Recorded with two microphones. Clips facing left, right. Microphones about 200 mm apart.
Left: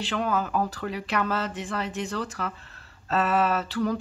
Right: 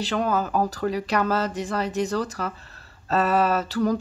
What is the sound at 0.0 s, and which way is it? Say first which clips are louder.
Speech: right 3 dB; 40° right (ahead or behind).